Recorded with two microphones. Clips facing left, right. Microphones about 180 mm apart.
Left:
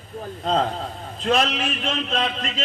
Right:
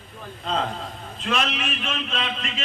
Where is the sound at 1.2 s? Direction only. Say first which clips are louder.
Left 5 dB; 35° left (ahead or behind).